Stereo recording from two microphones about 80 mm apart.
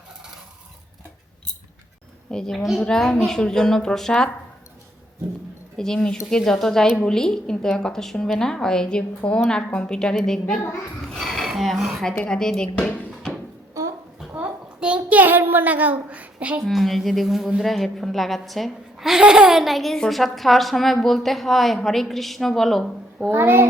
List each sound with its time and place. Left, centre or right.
2.3 s a woman's voice: centre
5.7 s a woman's voice: centre
11.1 s dishes: centre
12.3 s a woman's voice: centre
14.3 s a sound: centre
16.6 s a woman's voice: centre
23.3 s child singing: right